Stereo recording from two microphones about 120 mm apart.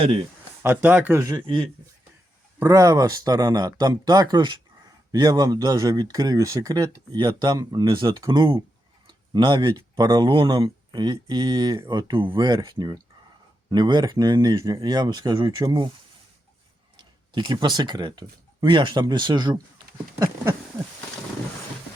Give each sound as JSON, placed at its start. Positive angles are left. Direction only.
{"t": 0.6, "sound": "speech", "side_deg": -15}
{"t": 1.2, "sound": "speech", "side_deg": -30}
{"t": 2.6, "sound": "speech", "side_deg": -30}
{"t": 9.0, "sound": "a sound", "side_deg": -40}
{"t": 10.0, "sound": "speech", "side_deg": -35}
{"t": 17.0, "sound": "speech", "side_deg": -40}
{"t": 20.1, "sound": "a sound", "side_deg": -25}